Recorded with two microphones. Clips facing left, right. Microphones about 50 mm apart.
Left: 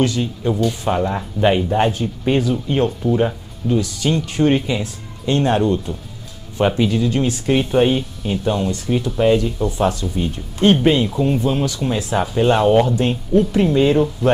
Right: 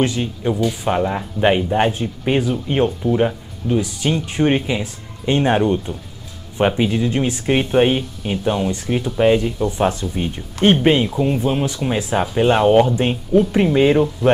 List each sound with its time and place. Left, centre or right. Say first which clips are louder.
0.0 s speech: even; right
11.1 s speech: even; centre